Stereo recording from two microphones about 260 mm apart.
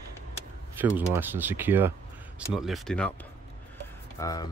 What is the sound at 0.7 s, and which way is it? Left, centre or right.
Speech, centre.